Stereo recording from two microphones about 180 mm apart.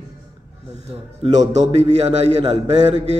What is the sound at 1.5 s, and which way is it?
Speech, 40° right (ahead or behind).